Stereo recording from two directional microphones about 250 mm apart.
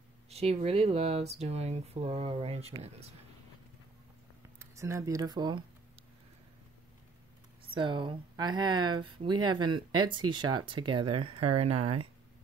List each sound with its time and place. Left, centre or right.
0.3 s speech: right
4.6 s speech: centre
7.7 s speech: centre
11.7 s speech: right